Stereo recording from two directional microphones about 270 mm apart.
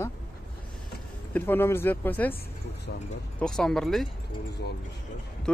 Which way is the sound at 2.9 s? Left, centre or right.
Left.